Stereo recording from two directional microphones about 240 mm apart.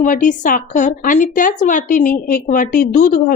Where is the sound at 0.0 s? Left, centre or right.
Left.